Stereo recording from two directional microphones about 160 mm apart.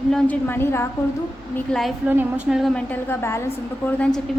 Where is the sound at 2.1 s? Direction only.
10° right (ahead or behind); by 3.5 s 15° left (ahead or behind).